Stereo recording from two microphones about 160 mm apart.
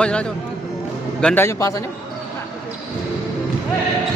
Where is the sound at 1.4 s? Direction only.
20° left (ahead or behind).